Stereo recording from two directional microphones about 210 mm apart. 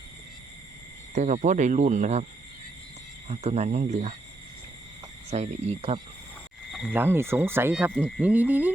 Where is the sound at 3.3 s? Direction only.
30° right (ahead or behind).